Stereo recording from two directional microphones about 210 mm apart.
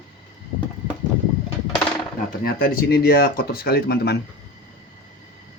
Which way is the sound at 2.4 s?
45° left (ahead or behind).